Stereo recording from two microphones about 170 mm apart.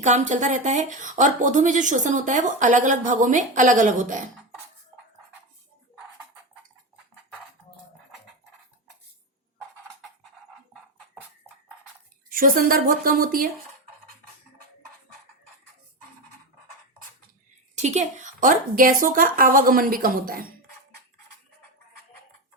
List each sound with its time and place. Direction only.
0.0 s speech: 45° right (ahead or behind)
12.3 s a woman's voice: 55° right (ahead or behind)
17.7 s a woman's voice: 40° right (ahead or behind); by 20.4 s 55° right (ahead or behind)